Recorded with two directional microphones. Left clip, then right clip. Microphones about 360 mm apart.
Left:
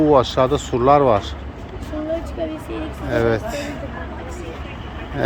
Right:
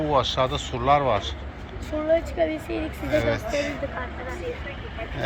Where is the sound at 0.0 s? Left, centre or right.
Centre.